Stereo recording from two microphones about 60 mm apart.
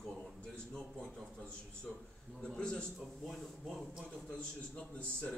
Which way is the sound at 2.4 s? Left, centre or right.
Centre.